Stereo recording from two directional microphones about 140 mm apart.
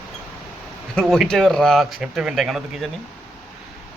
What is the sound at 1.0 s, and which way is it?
Speech, 5° left (ahead or behind).